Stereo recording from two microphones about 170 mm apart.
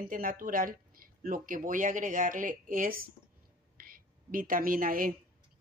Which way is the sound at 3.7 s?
55° right (ahead or behind).